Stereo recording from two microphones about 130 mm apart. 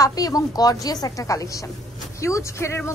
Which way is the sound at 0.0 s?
30° left (ahead or behind).